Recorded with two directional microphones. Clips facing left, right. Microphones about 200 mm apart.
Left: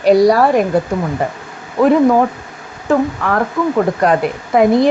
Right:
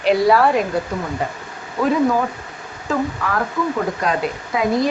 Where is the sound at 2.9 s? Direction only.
55° left (ahead or behind).